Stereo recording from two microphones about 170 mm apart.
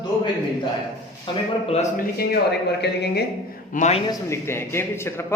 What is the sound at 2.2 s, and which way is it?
Speech, 75° left (ahead or behind).